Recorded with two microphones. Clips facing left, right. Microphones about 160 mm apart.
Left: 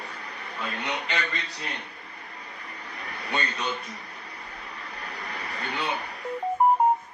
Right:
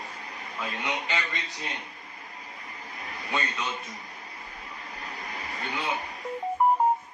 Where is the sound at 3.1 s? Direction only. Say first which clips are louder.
Left 1 dB; 65° left (ahead or behind).